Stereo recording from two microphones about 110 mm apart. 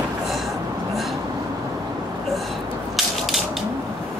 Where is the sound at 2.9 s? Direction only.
Centre (ahead or behind).